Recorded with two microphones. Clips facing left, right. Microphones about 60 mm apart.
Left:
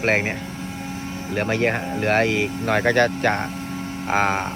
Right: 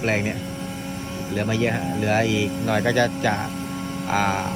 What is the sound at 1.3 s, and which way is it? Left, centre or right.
Speech, left.